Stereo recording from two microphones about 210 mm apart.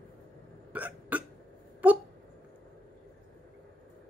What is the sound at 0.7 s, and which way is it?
Hiccup, 5° right (ahead or behind).